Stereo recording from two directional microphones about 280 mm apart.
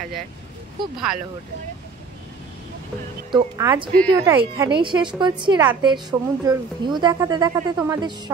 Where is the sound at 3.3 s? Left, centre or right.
Centre.